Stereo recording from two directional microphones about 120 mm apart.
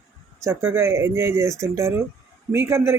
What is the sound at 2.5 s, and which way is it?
Speech, 20° right (ahead or behind).